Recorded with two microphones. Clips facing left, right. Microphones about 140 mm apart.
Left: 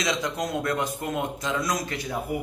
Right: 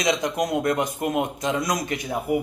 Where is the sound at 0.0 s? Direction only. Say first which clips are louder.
Right 4 dB; 15° right (ahead or behind).